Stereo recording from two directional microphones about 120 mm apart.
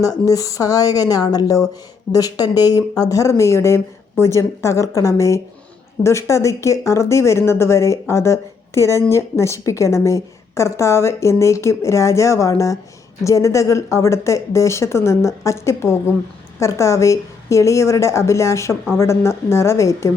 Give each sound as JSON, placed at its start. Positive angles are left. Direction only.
{"t": 0.0, "sound": "speech", "side_deg": 30}